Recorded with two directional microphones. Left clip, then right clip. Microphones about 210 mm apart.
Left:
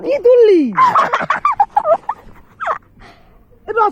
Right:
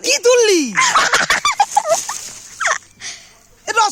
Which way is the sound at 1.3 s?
45° right (ahead or behind).